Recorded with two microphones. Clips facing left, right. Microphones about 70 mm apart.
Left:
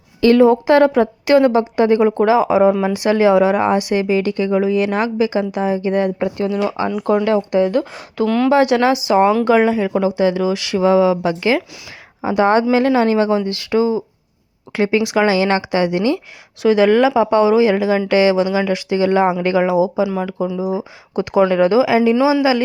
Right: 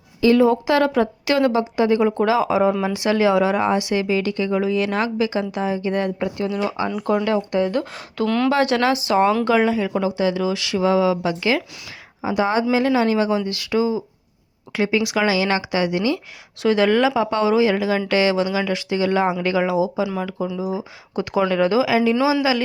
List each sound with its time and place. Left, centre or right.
0.3 s a woman's voice: left
5.9 s speech: centre
6.1 s a woman's voice: left
7.5 s speech: left
7.9 s speech: centre
8.4 s a woman's voice: centre
12.2 s a woman's voice: left
16.6 s speech: centre
22.1 s speech: centre